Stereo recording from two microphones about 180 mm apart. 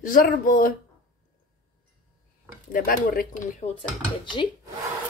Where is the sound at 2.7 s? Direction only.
55° left (ahead or behind).